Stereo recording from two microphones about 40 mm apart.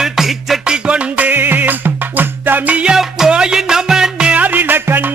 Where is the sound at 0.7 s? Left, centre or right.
Right.